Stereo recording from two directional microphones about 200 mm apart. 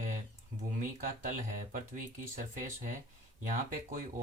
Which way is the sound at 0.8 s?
40° right (ahead or behind).